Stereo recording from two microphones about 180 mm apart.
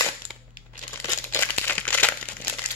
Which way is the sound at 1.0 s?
15° left (ahead or behind).